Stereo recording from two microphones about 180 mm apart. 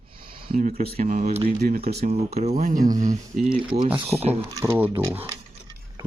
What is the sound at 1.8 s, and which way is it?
Speech, 60° right (ahead or behind).